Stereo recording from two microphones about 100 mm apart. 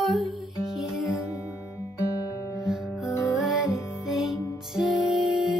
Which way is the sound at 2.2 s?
35° left (ahead or behind).